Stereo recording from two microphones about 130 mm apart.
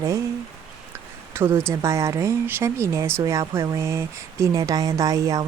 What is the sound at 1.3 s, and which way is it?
Speech, 20° right (ahead or behind).